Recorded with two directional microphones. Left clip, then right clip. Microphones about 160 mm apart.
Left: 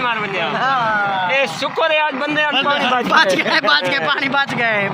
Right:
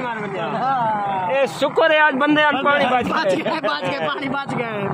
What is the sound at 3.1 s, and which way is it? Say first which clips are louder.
Speech: left 6 dB; 5° right (ahead or behind).